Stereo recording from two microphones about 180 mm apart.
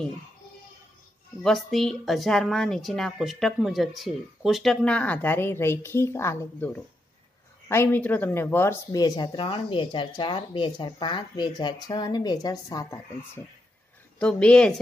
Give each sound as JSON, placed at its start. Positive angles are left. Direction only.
{"t": 1.4, "sound": "a woman's voice", "side_deg": 0}
{"t": 14.1, "sound": "a woman's voice", "side_deg": 5}